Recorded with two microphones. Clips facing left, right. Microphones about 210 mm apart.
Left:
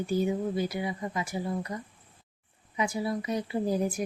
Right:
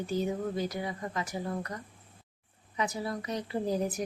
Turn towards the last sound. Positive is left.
turn(degrees=10)  # may be behind; listen again after turning